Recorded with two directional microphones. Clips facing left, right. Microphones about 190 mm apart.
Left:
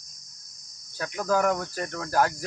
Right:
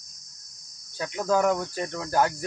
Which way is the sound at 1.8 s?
15° right (ahead or behind).